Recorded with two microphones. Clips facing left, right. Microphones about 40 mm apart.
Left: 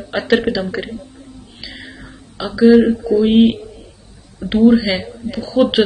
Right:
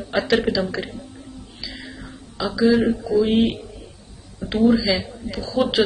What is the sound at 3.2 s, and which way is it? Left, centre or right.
Speech, left.